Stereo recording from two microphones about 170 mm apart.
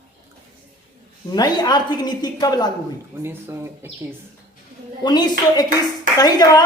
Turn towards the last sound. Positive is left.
turn(degrees=20)  # may be behind; listen again after turning